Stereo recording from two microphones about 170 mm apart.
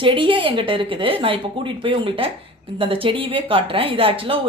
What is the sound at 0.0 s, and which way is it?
Speech, 30° right (ahead or behind).